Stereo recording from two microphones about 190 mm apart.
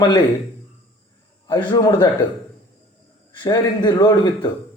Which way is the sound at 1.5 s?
20° left (ahead or behind).